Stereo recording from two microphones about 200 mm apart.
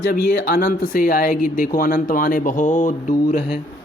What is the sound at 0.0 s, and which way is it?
Speech, 50° left (ahead or behind).